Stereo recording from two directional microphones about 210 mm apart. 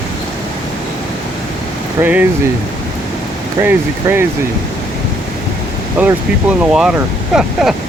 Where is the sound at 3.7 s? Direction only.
10° right (ahead or behind).